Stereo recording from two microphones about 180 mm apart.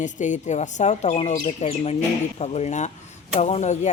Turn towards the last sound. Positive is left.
turn(degrees=40)  # may be behind; listen again after turning